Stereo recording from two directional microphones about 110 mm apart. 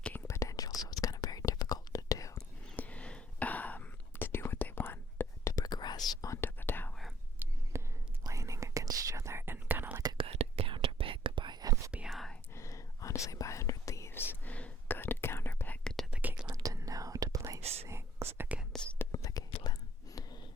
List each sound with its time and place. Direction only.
0.3 s whispering: 30° left (ahead or behind)
2.7 s whispering: 15° left (ahead or behind)
5.6 s whispering: 40° left (ahead or behind); by 6.9 s 20° left (ahead or behind)
7.7 s whispering: 25° right (ahead or behind)
10.2 s whispering: 60° right (ahead or behind); by 11.8 s 35° right (ahead or behind)
12.0 s whispering: centre (ahead or behind)
12.5 s whispering: 30° left (ahead or behind); by 16.0 s 5° left (ahead or behind)
16.5 s whispering: 35° right (ahead or behind)
17.6 s whispering: 70° right (ahead or behind)
17.8 s whispering: 20° right (ahead or behind)
18.9 s whispering: 30° left (ahead or behind)